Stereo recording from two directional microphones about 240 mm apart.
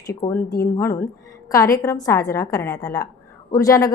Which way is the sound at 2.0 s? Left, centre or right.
Centre.